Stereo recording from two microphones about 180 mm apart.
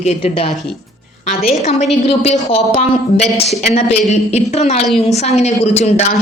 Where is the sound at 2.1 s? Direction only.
35° left (ahead or behind).